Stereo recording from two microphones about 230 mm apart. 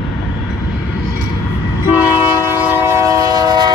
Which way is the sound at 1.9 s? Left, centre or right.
Centre.